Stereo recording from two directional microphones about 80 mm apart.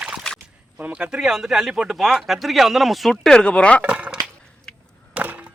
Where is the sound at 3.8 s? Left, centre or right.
Centre.